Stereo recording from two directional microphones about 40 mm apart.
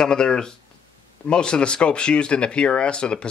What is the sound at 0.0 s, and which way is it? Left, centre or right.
Speech, left.